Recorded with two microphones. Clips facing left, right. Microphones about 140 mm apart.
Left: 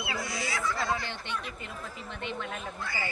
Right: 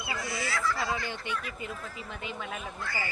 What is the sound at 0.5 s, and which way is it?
Speech, 20° left (ahead or behind).